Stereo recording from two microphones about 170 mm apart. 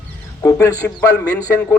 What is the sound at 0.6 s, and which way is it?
Speech, 20° left (ahead or behind).